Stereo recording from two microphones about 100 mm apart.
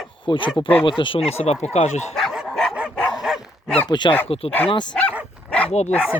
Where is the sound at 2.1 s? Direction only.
Centre (ahead or behind).